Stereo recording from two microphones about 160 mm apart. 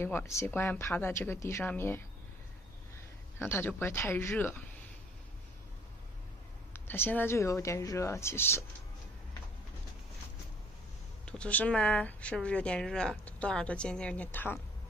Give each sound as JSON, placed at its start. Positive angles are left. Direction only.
{"t": 0.0, "sound": "a woman's voice", "side_deg": 15}
{"t": 3.3, "sound": "a woman's voice", "side_deg": 15}
{"t": 6.7, "sound": "a woman's voice", "side_deg": 15}
{"t": 11.2, "sound": "a woman's voice", "side_deg": 10}